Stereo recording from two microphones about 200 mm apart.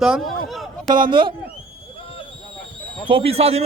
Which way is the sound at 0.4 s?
Centre (ahead or behind).